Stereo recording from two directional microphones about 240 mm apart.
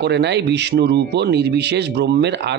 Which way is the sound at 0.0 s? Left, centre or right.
Right.